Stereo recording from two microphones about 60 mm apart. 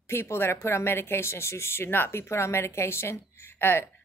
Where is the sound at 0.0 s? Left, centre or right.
Left.